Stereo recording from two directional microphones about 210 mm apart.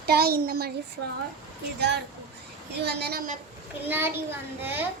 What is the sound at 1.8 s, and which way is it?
A child's voice, 55° right (ahead or behind).